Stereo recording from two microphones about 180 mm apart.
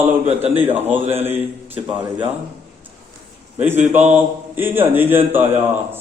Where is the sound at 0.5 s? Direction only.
10° right (ahead or behind).